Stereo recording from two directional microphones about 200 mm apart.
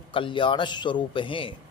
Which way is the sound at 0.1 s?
25° left (ahead or behind).